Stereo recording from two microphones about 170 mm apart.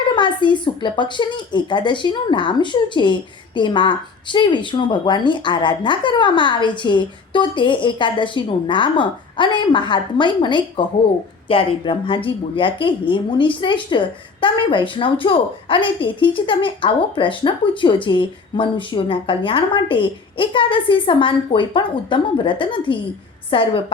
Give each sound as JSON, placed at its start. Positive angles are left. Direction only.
{"t": 0.2, "sound": "a woman's voice", "side_deg": 25}